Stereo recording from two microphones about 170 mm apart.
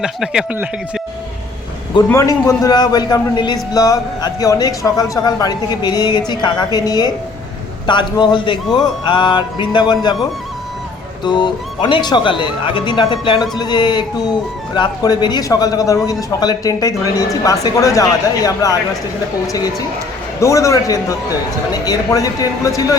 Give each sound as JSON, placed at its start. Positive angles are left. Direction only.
{"t": 0.0, "sound": "speech", "side_deg": -5}
{"t": 2.0, "sound": "a man's voice", "side_deg": 20}
{"t": 11.2, "sound": "a man's voice", "side_deg": 25}
{"t": 20.4, "sound": "a man's voice", "side_deg": 20}